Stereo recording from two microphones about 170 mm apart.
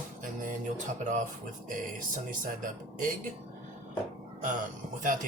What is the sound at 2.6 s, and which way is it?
Music, 50° right (ahead or behind).